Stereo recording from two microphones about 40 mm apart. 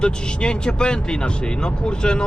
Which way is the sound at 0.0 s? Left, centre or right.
Left.